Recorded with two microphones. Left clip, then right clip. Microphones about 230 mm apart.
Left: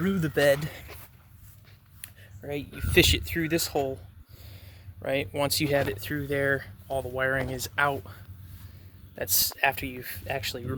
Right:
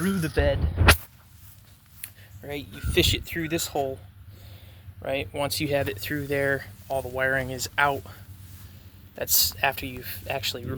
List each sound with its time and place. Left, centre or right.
0.0 s speech: left
2.0 s a sound: left
2.9 s speech: left
3.3 s speech: centre
5.0 s speech: left